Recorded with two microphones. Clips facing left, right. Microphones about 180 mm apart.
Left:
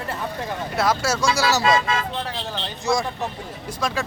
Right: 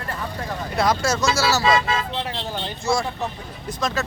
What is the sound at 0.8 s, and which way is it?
Speech, 5° left (ahead or behind).